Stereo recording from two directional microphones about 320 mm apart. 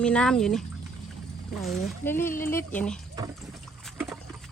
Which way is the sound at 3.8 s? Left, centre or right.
Centre.